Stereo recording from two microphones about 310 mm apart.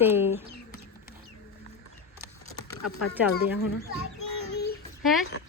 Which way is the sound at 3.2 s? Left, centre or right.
Centre.